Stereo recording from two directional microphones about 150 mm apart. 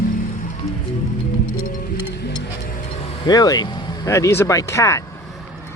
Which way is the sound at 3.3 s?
25° left (ahead or behind).